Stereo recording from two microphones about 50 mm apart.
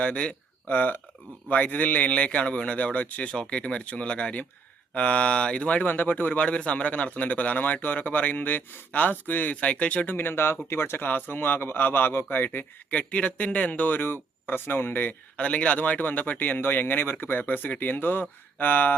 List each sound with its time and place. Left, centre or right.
0.0 s a man's voice: left
5.9 s a man's voice: left
10.2 s speech: left
12.9 s a man's voice: left
15.4 s a man's voice: left